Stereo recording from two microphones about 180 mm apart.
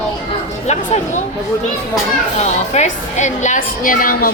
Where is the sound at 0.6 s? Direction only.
40° left (ahead or behind).